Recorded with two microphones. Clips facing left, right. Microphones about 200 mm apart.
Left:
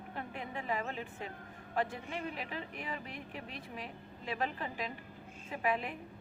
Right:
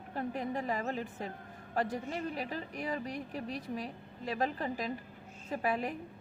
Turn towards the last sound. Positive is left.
turn(degrees=-40)  # may be behind; listen again after turning